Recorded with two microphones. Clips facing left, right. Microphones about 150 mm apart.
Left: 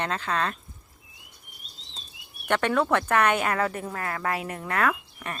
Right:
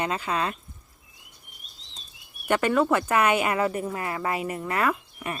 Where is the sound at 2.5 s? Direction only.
5° right (ahead or behind).